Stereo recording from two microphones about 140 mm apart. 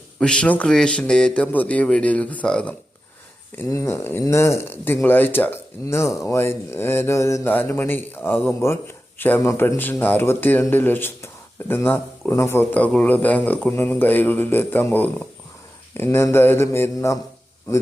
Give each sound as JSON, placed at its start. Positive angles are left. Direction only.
{"t": 0.2, "sound": "speech", "side_deg": 5}
{"t": 3.7, "sound": "speech", "side_deg": 20}